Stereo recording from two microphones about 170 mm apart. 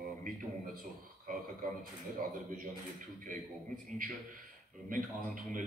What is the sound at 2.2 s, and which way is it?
Speech, 55° right (ahead or behind).